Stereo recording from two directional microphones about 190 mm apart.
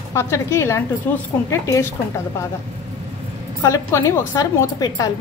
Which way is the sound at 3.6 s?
15° left (ahead or behind).